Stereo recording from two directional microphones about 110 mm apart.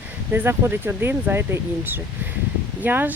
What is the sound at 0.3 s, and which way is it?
Speech, 20° right (ahead or behind).